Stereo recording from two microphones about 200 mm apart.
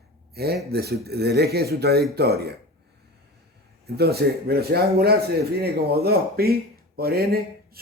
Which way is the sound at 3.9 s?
55° right (ahead or behind).